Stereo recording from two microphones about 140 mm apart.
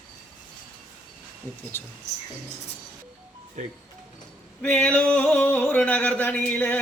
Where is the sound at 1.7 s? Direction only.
15° left (ahead or behind).